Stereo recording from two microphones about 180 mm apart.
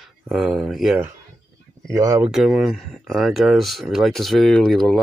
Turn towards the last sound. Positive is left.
turn(degrees=0)  # may be behind; listen again after turning